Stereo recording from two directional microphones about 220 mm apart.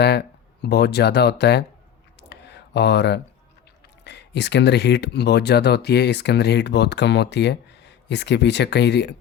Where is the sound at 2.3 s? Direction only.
50° left (ahead or behind).